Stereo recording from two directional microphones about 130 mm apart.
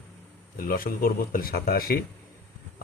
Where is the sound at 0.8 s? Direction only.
90° left.